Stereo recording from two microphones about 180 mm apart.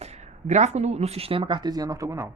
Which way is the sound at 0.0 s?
40° right (ahead or behind).